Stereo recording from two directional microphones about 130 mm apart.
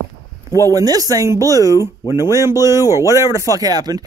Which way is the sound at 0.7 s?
30° right (ahead or behind).